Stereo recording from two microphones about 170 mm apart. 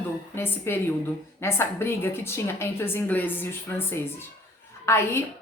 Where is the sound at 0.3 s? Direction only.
15° left (ahead or behind).